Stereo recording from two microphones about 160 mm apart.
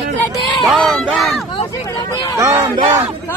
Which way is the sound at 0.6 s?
Centre (ahead or behind).